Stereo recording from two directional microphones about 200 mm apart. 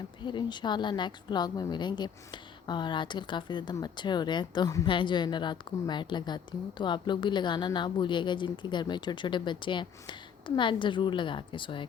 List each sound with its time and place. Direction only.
0.3 s a woman's voice: 20° left (ahead or behind)